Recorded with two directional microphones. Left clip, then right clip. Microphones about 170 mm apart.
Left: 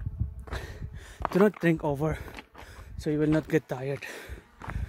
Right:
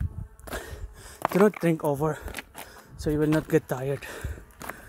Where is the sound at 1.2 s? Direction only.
75° right (ahead or behind).